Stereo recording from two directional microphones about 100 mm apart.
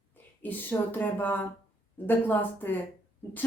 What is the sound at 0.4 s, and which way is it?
Speech, 20° left (ahead or behind).